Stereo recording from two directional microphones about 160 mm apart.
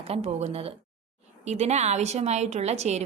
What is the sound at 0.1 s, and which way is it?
A woman's voice, 40° right (ahead or behind).